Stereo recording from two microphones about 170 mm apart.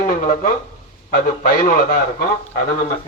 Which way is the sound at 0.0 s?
55° left (ahead or behind).